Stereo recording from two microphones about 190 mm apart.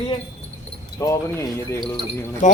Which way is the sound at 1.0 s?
15° left (ahead or behind).